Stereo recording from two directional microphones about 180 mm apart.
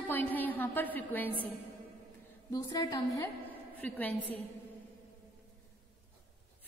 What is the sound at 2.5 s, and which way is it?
Speech, 20° left (ahead or behind).